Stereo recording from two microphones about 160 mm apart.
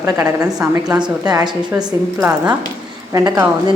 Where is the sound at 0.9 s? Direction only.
25° right (ahead or behind).